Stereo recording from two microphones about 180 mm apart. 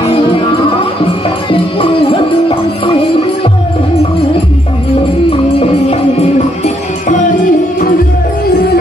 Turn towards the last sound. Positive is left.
turn(degrees=45)  # may be behind; listen again after turning